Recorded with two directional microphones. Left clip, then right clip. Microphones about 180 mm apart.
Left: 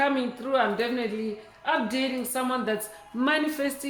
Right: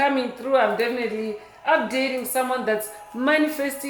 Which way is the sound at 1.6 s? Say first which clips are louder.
Right 6 dB; 30° left (ahead or behind).